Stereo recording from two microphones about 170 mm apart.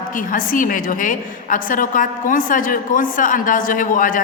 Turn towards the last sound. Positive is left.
turn(degrees=50)  # may be behind; listen again after turning